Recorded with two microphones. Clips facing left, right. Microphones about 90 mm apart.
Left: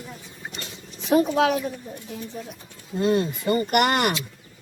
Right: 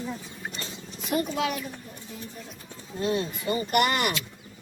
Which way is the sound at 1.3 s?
90° left.